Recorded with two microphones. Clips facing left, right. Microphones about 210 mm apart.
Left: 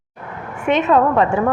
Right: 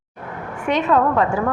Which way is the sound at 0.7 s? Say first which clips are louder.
Left 3 dB; 20° left (ahead or behind).